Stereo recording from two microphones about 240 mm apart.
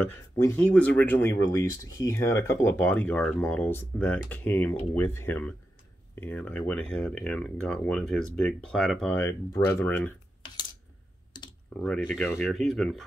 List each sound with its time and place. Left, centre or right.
0.4 s speech: centre
10.4 s a sound: centre
11.7 s speech: centre